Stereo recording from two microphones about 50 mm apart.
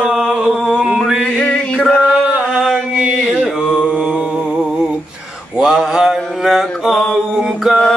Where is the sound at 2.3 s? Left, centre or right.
Right.